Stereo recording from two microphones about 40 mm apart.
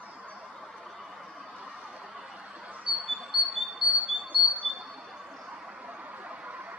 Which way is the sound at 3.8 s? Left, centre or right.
Centre.